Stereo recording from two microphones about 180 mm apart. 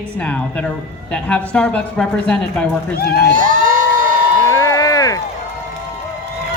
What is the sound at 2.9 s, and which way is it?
Speech, 60° left (ahead or behind).